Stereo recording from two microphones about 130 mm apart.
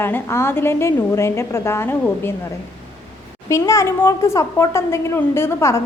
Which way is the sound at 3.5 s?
20° left (ahead or behind).